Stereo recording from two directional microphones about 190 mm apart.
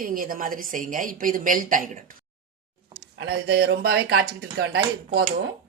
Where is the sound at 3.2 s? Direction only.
60° right (ahead or behind).